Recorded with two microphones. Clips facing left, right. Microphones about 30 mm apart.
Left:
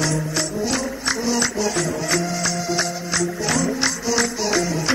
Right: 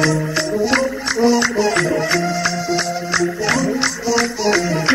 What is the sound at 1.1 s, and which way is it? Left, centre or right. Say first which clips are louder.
Music: right 10 dB; right.